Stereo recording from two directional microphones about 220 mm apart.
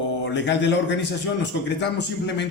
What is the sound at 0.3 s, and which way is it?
A man's voice, 55° left (ahead or behind).